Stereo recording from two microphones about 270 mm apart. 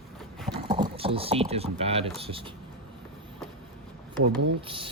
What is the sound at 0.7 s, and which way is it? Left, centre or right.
Speech, right.